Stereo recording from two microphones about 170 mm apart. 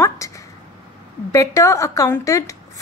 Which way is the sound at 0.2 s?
15° left (ahead or behind).